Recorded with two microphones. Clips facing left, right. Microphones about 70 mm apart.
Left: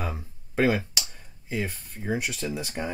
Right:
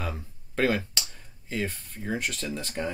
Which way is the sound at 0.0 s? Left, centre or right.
Centre.